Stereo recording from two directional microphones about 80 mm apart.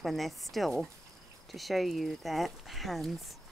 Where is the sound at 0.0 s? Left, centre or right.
Centre.